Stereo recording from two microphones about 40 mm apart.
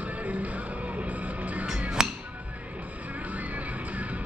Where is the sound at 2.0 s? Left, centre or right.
Centre.